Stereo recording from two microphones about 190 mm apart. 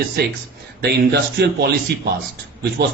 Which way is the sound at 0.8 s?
60° right (ahead or behind).